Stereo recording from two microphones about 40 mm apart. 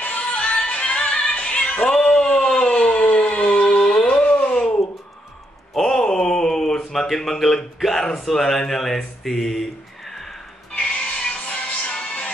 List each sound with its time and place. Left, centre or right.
0.0 s music: left
1.9 s cat: left
2.5 s a sound: centre
2.9 s a sound: left
5.8 s mantra: centre
10.7 s music: left